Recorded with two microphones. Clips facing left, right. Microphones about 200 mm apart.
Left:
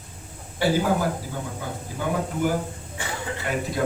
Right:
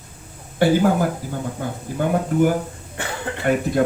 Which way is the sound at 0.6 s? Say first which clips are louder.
Right 6 dB; 55° right (ahead or behind).